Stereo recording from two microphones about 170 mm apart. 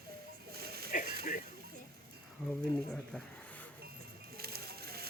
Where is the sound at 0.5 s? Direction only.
65° right (ahead or behind).